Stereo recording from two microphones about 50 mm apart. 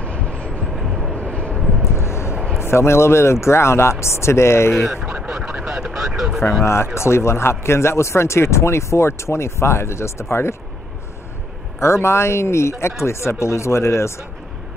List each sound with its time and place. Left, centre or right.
0.0 s train: left
0.7 s vehicle: centre
1.3 s vehicle: left
1.6 s vehicle: centre
2.0 s vehicle: left
2.6 s speech: left
4.7 s speech: centre
5.0 s a sound: right
5.5 s vehicle: right
5.9 s vehicle: centre
6.6 s speech: left
11.8 s speech: left